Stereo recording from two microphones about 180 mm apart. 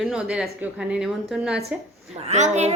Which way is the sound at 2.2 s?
40° right (ahead or behind).